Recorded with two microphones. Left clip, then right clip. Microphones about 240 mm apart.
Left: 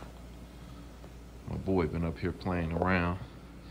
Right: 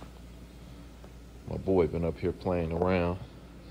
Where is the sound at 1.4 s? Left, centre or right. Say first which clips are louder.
Right 5 dB; left.